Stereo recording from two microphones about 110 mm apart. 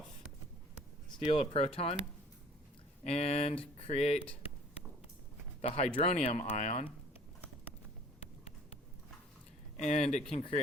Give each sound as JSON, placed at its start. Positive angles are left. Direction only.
{"t": 1.2, "sound": "speech", "side_deg": 60}
{"t": 3.0, "sound": "speech", "side_deg": 70}
{"t": 5.6, "sound": "speech", "side_deg": 65}
{"t": 9.8, "sound": "speech", "side_deg": 85}
{"t": 10.3, "sound": "speech", "side_deg": 70}